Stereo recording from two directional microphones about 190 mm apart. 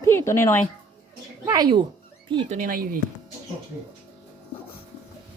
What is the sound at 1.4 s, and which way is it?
Speech, 20° right (ahead or behind).